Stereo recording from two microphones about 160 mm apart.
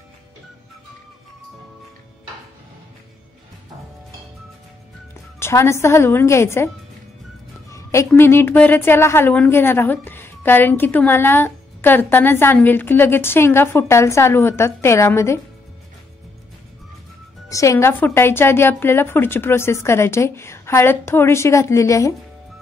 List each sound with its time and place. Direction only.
5.4 s a woman's voice: 15° left (ahead or behind)
7.7 s a sound: 20° left (ahead or behind)
8.1 s a woman's voice: 15° left (ahead or behind)
17.5 s a woman's voice: 20° left (ahead or behind)